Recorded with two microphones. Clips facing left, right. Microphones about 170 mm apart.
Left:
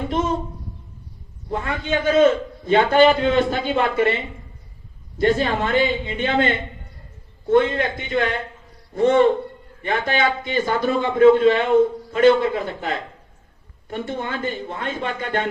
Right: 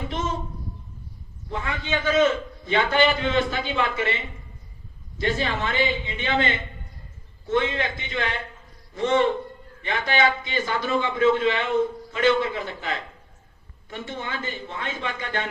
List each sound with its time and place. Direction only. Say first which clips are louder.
0.1 s a man's voice: left 7 dB; 50° left (ahead or behind)
1.5 s a man's voice: left 5 dB; 50° left (ahead or behind)